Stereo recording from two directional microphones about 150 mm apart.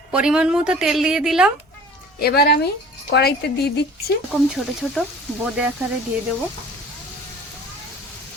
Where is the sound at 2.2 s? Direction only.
90° left.